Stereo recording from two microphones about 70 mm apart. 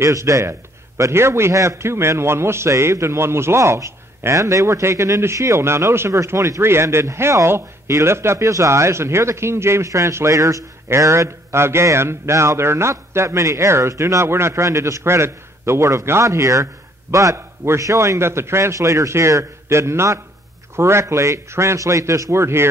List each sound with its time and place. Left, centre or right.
0.0 s a man's voice: right